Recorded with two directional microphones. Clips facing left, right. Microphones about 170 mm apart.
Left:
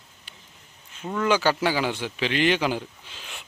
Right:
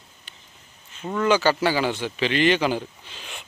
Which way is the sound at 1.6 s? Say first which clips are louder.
Right 2 dB; 10° left (ahead or behind).